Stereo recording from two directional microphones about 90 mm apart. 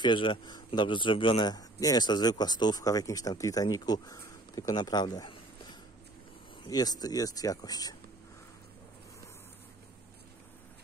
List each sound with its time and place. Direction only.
0.0 s speech: 65° left (ahead or behind); by 5.3 s 50° left (ahead or behind)
6.7 s speech: 45° left (ahead or behind)